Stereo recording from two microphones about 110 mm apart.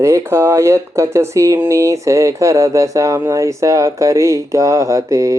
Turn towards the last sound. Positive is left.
turn(degrees=-30)  # may be behind; listen again after turning